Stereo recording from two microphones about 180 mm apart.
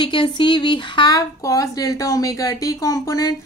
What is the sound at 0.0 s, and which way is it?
A woman's voice, 25° left (ahead or behind).